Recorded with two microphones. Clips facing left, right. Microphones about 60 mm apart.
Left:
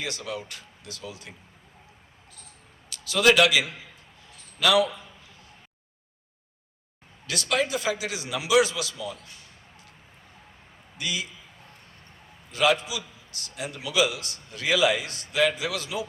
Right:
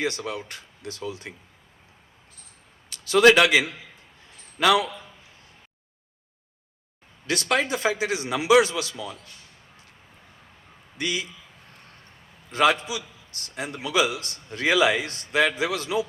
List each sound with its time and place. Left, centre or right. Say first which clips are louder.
0.0 s a man's voice: right 5 dB; right
2.9 s a man's voice: right 4 dB; right
7.3 s a man's voice: right 2 dB; right
10.9 s a man's voice: right 3 dB; right
12.5 s a man's voice: right 2 dB; right